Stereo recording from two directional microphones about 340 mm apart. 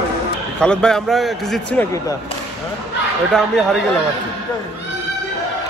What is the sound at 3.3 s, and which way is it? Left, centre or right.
Speech, centre.